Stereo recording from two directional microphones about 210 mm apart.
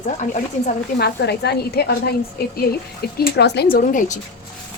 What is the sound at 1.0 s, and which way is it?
A woman's voice, 50° left (ahead or behind).